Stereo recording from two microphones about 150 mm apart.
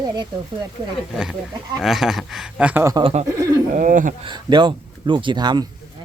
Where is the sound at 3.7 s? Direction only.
60° right (ahead or behind).